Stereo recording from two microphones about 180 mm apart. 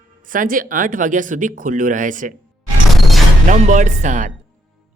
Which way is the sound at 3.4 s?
40° right (ahead or behind).